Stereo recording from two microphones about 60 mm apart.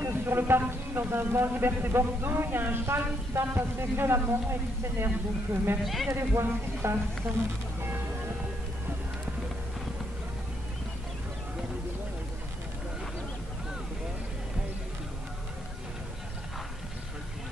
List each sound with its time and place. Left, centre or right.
0.0 s speech: right